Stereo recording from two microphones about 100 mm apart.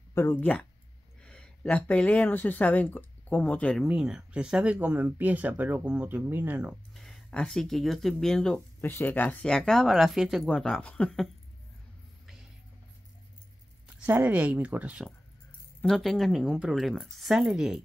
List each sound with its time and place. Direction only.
0.1 s speech: 30° left (ahead or behind)
0.4 s speech: 15° left (ahead or behind)
3.8 s speech: 10° right (ahead or behind)
6.9 s speech: centre (ahead or behind)
8.8 s speech: 20° left (ahead or behind)
9.5 s speech: 5° left (ahead or behind)
14.0 s speech: 15° right (ahead or behind)
15.8 s speech: 5° left (ahead or behind)